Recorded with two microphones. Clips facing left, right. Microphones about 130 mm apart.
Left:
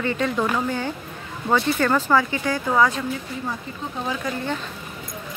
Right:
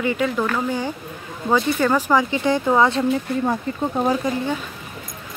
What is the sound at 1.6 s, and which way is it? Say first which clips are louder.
Speech: right 2 dB; 5° right (ahead or behind).